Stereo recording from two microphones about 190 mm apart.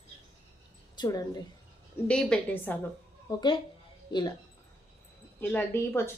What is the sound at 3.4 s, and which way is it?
Speech, 25° left (ahead or behind).